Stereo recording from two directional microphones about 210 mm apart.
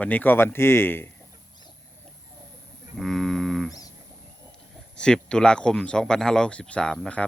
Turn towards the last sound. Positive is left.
turn(degrees=5)  # may be behind; listen again after turning